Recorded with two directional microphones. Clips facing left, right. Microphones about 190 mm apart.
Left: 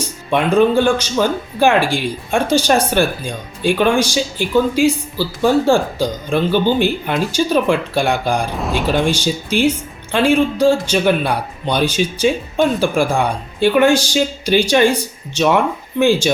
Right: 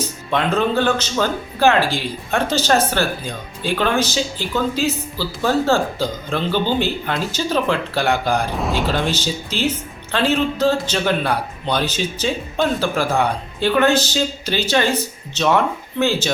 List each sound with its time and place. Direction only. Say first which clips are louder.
0.3 s speech: left 6 dB; 15° left (ahead or behind)
8.5 s speech: left 1 dB; centre (ahead or behind)
8.9 s speech: left 5 dB; 15° left (ahead or behind)
16.0 s speech: left 6 dB; 15° left (ahead or behind)